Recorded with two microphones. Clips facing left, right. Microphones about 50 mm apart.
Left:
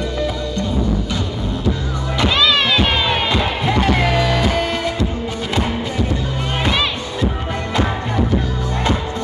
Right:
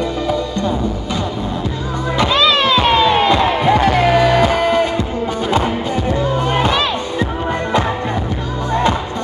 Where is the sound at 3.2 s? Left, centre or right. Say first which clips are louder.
Right 6 dB; right.